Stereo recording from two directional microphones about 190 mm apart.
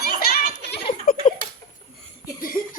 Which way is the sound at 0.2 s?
55° left (ahead or behind).